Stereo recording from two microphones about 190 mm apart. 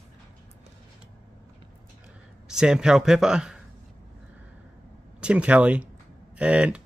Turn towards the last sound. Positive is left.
turn(degrees=-5)  # may be behind; listen again after turning